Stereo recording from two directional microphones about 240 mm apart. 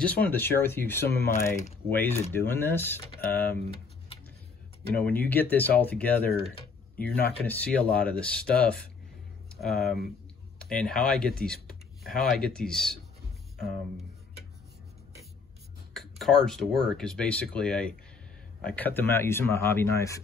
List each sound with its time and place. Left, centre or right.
0.0 s speech: centre
1.0 s speech: left
1.3 s speech: centre
4.9 s speech: centre
15.9 s speech: centre